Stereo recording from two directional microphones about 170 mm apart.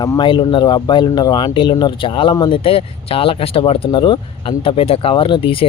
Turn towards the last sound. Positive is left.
turn(degrees=30)  # may be behind; listen again after turning